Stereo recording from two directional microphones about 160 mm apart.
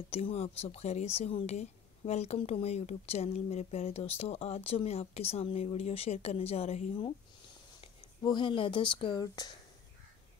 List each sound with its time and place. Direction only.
0.1 s speech: 40° left (ahead or behind)
8.2 s speech: 30° left (ahead or behind)